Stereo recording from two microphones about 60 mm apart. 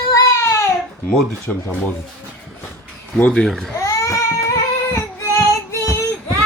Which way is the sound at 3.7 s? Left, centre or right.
Left.